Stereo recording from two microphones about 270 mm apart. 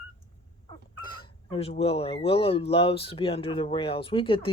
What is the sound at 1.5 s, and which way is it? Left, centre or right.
Speech, left.